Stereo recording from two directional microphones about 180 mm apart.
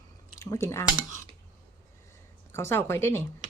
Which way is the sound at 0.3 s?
15° left (ahead or behind).